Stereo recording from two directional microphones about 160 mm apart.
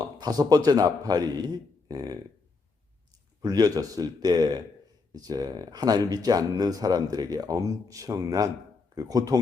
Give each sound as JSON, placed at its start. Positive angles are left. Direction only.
{"t": 0.0, "sound": "speech", "side_deg": -25}
{"t": 3.4, "sound": "speech", "side_deg": -25}